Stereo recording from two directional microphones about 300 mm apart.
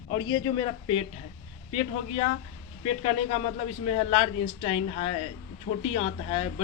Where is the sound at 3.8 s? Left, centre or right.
Centre.